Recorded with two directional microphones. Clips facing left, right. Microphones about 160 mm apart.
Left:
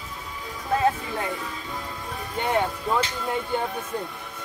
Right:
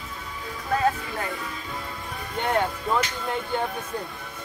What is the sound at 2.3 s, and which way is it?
Speech, 5° left (ahead or behind).